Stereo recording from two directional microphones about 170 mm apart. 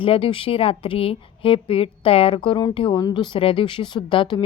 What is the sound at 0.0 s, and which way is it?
A woman's voice, 30° left (ahead or behind).